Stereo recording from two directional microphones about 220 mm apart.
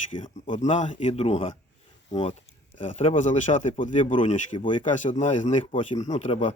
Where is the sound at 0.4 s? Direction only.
35° left (ahead or behind).